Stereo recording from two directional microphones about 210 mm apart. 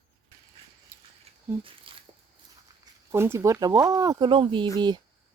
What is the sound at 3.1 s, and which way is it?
Speech, 10° right (ahead or behind).